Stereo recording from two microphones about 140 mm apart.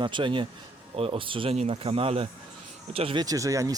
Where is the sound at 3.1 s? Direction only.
25° right (ahead or behind).